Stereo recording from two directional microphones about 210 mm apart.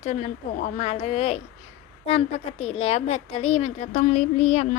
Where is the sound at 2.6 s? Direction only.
30° left (ahead or behind).